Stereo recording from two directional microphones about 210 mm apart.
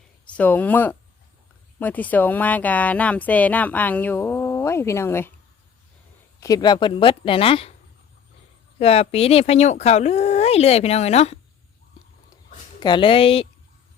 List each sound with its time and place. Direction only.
0.3 s speech: 5° left (ahead or behind)
6.4 s speech: 20° left (ahead or behind)
8.8 s speech: 30° left (ahead or behind)
12.8 s speech: 25° left (ahead or behind)